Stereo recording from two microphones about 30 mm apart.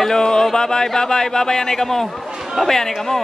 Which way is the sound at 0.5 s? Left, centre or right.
Left.